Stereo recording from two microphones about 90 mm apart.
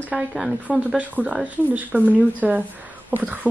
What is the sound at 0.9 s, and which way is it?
Speech, 15° right (ahead or behind).